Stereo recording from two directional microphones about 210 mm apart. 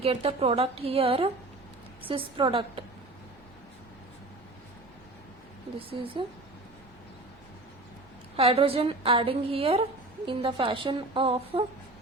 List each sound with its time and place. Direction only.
0.0 s a woman's voice: 25° right (ahead or behind)
5.9 s a woman's voice: 25° right (ahead or behind)
8.4 s a woman's voice: 25° right (ahead or behind)